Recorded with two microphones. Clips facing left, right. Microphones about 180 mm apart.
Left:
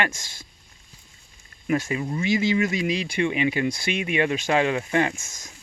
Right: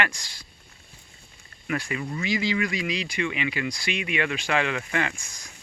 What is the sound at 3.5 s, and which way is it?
Speech, 25° left (ahead or behind).